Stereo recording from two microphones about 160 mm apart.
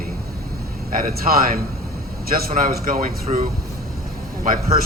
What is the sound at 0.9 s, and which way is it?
A man's voice, 65° right (ahead or behind).